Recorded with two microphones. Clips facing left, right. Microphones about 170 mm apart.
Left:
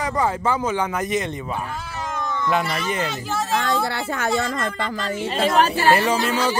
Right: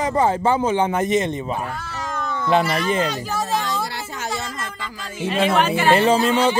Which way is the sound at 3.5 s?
60° left (ahead or behind).